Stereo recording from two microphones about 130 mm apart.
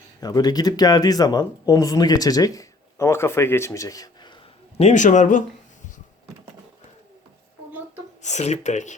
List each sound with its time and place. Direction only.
0.2 s speech: 30° left (ahead or behind)
4.8 s speech: 65° left (ahead or behind)
8.2 s speech: 60° left (ahead or behind)